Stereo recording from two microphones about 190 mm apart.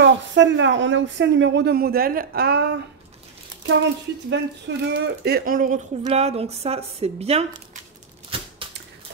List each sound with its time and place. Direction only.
0.0 s speech: 75° right (ahead or behind)
4.3 s speech: 65° right (ahead or behind); by 7.6 s 35° right (ahead or behind)
8.3 s a sound: 30° right (ahead or behind)